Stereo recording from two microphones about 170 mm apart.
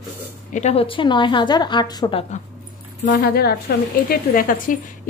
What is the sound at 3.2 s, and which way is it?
A woman's voice, 65° left (ahead or behind).